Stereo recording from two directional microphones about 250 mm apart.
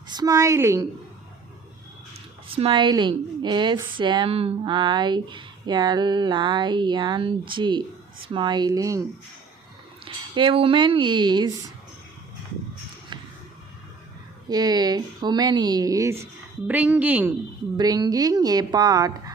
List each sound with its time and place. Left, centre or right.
0.1 s a woman's voice: centre
2.6 s a woman's voice: centre
10.3 s a woman's voice: right
14.5 s a woman's voice: centre